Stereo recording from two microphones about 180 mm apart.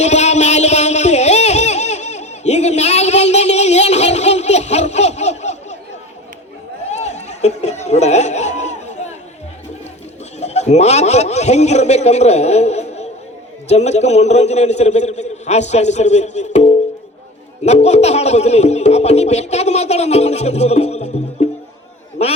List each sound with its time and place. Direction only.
0.0 s music: 40° left (ahead or behind)
6.9 s chatter: 40° left (ahead or behind)
10.4 s a man's voice: 40° left (ahead or behind)